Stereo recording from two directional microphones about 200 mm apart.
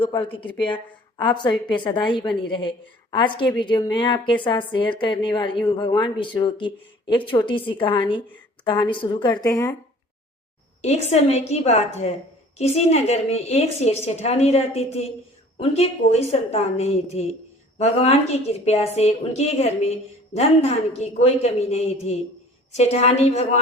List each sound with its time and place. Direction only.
0.0 s a woman's voice: 25° left (ahead or behind)
1.5 s a woman's voice: 5° left (ahead or behind)
1.8 s a woman's voice: 25° left (ahead or behind)
10.8 s a sound: 35° left (ahead or behind)
11.1 s a woman's voice: 35° left (ahead or behind)